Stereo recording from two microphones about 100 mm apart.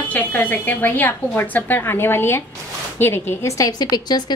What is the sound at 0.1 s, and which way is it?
A woman's voice, 15° left (ahead or behind).